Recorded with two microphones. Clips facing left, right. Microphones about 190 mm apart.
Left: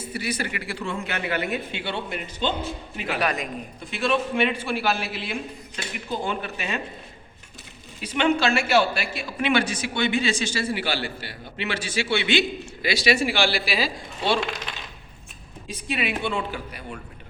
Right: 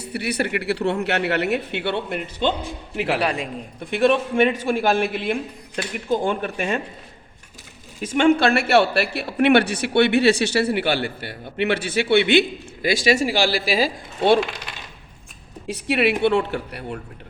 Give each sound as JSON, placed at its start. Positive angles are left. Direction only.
{"t": 0.0, "sound": "a man's voice", "side_deg": -65}
{"t": 2.9, "sound": "a man's voice", "side_deg": -70}
{"t": 3.2, "sound": "a man's voice", "side_deg": -30}
{"t": 3.8, "sound": "a man's voice", "side_deg": -55}
{"t": 8.0, "sound": "a man's voice", "side_deg": -45}
{"t": 15.6, "sound": "a man's voice", "side_deg": -70}